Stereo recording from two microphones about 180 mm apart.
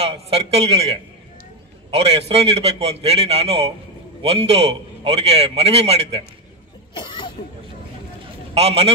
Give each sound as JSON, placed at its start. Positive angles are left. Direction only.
{"t": 0.0, "sound": "a man's voice", "side_deg": -35}
{"t": 6.9, "sound": "cough", "side_deg": 25}
{"t": 8.5, "sound": "a man's voice", "side_deg": -35}